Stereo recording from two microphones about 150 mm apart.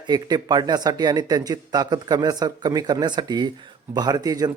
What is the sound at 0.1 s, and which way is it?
Speech, 25° right (ahead or behind).